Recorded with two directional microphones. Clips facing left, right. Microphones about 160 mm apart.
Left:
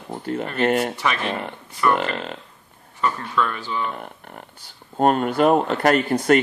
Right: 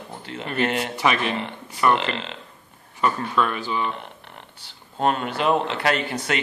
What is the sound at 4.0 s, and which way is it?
Speech, 45° left (ahead or behind).